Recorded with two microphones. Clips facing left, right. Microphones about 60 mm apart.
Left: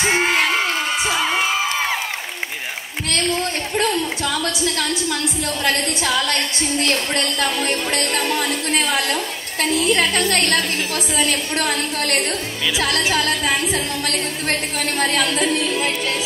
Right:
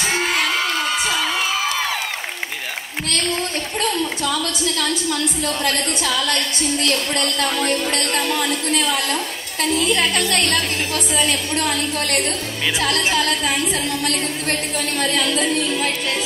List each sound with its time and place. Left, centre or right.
0.0 s whoop: left
3.8 s a sound: left
5.7 s a woman's voice: left
14.8 s a woman's voice: left